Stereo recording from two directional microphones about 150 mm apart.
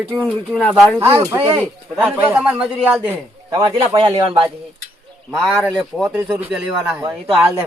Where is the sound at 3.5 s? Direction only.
30° right (ahead or behind).